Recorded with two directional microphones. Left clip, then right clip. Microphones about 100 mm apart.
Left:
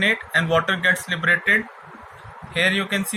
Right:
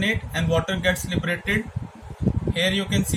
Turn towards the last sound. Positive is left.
turn(degrees=-15)  # may be behind; listen again after turning